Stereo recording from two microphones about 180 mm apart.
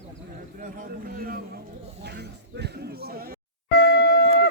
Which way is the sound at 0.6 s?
50° right (ahead or behind).